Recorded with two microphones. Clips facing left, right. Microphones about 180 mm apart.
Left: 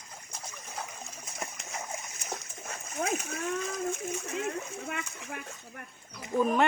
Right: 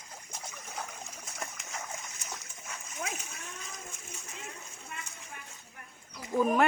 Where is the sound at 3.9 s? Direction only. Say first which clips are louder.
Left 14 dB; 65° left (ahead or behind).